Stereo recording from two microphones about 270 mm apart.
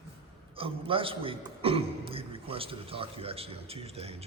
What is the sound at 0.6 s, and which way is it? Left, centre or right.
A man's voice, centre.